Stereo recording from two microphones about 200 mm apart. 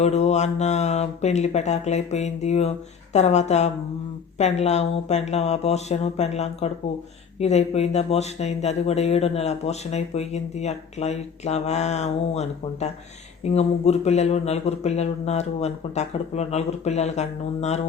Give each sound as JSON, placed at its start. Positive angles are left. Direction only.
{"t": 0.0, "sound": "speech", "side_deg": 35}